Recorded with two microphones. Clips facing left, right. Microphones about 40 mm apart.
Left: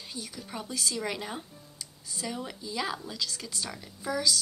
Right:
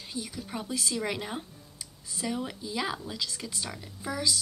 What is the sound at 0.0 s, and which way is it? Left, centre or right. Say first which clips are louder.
A woman's voice: right 3 dB; centre.